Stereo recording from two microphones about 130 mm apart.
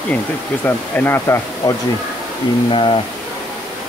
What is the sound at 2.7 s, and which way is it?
Speech, 40° left (ahead or behind).